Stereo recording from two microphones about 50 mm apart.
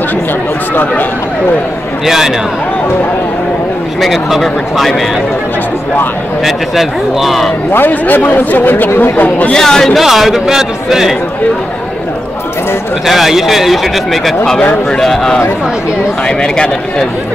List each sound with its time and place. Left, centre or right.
2.0 s a man's voice: centre
4.0 s speech: centre
6.4 s speech: centre
7.7 s speech: left
9.5 s speech: centre
9.9 s speech: centre
13.0 s speech: centre
14.6 s speech: left
15.0 s speech: centre